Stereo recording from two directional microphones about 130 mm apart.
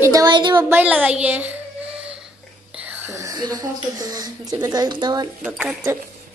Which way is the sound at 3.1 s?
25° right (ahead or behind).